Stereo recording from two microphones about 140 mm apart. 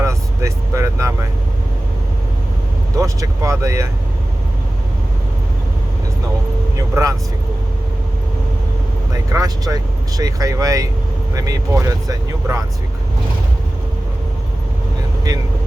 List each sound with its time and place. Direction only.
0.0 s vehicle: 20° right (ahead or behind)
3.0 s speech: 20° right (ahead or behind)
6.7 s speech: 25° right (ahead or behind)
9.1 s speech: 25° right (ahead or behind)